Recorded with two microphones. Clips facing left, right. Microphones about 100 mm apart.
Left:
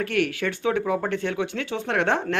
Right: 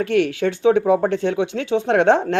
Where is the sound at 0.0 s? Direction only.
25° right (ahead or behind).